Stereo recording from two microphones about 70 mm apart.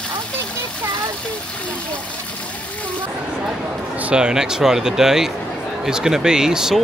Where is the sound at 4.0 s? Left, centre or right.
Centre.